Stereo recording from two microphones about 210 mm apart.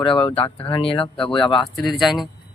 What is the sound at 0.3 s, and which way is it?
Speech, 25° left (ahead or behind).